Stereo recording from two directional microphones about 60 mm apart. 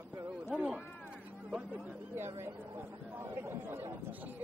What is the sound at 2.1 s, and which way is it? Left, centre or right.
Speech, right.